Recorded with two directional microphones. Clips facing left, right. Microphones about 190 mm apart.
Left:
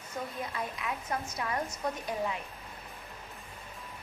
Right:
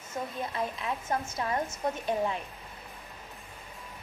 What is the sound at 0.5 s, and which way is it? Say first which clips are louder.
A woman's voice: right 3 dB; 30° right (ahead or behind).